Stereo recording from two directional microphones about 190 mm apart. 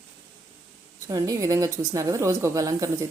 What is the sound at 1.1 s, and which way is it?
A woman's voice, 20° right (ahead or behind).